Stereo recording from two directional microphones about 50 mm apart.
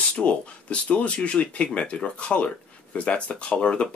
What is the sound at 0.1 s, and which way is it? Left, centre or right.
Speech, left.